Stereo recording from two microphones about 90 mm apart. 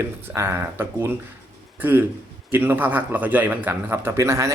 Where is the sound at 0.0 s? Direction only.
30° right (ahead or behind).